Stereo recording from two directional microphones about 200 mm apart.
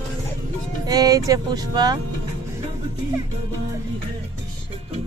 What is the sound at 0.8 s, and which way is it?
Speech, 20° right (ahead or behind).